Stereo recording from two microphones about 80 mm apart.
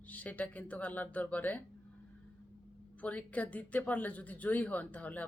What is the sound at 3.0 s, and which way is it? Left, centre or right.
Speech, centre.